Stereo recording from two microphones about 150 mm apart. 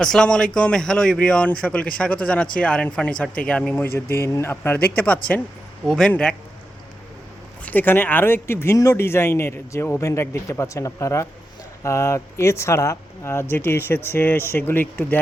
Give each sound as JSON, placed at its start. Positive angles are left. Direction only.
{"t": 0.0, "sound": "speech", "side_deg": 5}
{"t": 4.2, "sound": "speech", "side_deg": 20}
{"t": 7.6, "sound": "speech", "side_deg": 10}